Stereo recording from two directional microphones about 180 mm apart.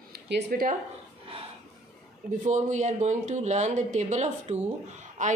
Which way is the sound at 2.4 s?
40° right (ahead or behind).